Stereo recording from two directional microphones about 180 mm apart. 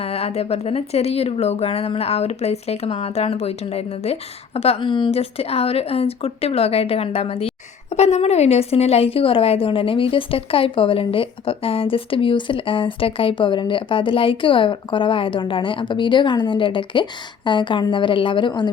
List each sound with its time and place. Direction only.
0.0 s speech: 35° left (ahead or behind)